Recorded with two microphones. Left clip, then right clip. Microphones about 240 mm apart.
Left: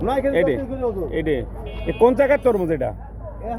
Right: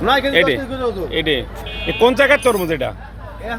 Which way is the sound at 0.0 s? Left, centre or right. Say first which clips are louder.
Right 5 dB; centre.